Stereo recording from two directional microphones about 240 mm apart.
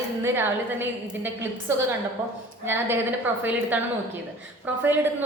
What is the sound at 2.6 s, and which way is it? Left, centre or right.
A woman's voice, centre.